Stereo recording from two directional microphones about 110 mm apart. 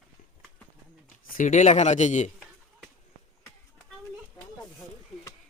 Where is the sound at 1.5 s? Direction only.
90° left.